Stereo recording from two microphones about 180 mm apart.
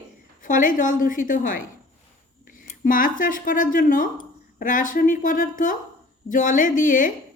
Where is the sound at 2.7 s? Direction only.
50° left (ahead or behind).